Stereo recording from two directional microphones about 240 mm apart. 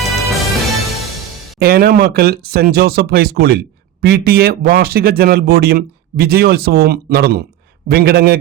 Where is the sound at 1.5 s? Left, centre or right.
Right.